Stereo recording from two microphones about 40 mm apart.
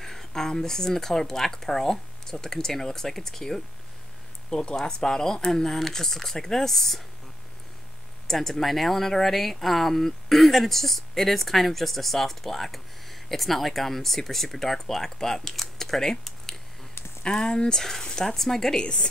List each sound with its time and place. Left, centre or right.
0.0 s speech: centre
4.5 s speech: left; by 7.0 s centre
8.3 s speech: centre
18.8 s speech: left